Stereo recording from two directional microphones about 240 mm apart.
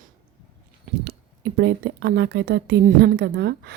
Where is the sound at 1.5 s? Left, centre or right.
Right.